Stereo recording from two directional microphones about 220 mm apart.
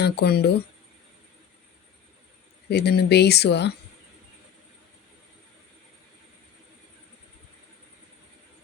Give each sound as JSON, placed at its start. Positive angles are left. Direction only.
{"t": 0.0, "sound": "speech", "side_deg": 45}
{"t": 2.6, "sound": "speech", "side_deg": 50}